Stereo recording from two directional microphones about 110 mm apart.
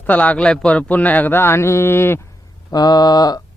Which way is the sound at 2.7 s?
40° left (ahead or behind).